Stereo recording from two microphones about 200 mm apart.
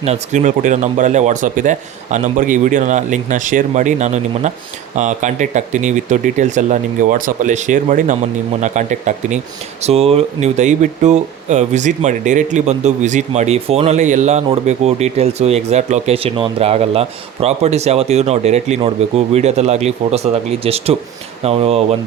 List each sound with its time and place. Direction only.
0.0 s speech: 35° right (ahead or behind)